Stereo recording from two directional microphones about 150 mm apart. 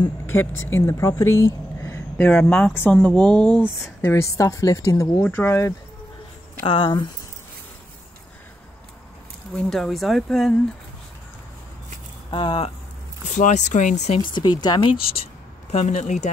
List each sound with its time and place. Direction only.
0.3 s speech: 15° left (ahead or behind)
6.6 s speech: 35° left (ahead or behind)
9.6 s speech: centre (ahead or behind)
12.3 s speech: 35° left (ahead or behind)
13.3 s speech: 55° left (ahead or behind)
14.2 s speech: 30° left (ahead or behind)
15.7 s speech: 50° left (ahead or behind)